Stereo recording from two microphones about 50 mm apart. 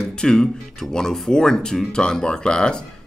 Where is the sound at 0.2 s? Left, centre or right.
Centre.